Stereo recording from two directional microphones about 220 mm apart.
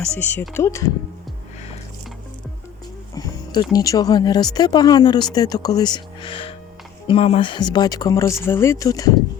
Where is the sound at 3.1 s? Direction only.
15° left (ahead or behind).